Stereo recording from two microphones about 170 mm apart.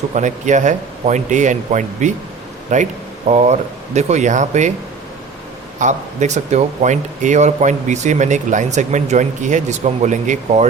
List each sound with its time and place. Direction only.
0.1 s speech: 45° right (ahead or behind)
5.8 s speech: 45° right (ahead or behind)